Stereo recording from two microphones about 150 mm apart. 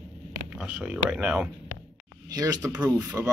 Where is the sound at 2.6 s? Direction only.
15° right (ahead or behind).